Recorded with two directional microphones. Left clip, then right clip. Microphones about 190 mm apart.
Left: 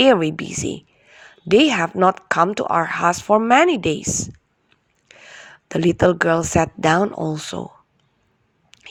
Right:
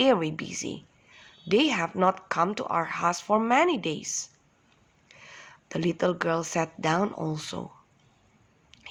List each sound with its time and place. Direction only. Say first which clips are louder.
0.0 s speech: left 9 dB; 40° left (ahead or behind)
8.7 s squish: left 4 dB; 40° left (ahead or behind)